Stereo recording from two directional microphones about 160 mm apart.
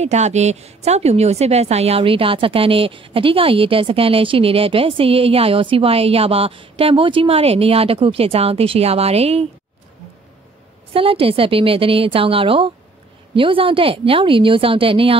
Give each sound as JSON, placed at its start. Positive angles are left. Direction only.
{"t": 0.0, "sound": "a woman's voice", "side_deg": -45}
{"t": 10.9, "sound": "a woman's voice", "side_deg": -35}